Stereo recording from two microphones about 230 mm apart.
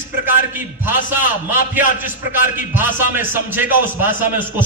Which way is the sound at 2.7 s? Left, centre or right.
Centre.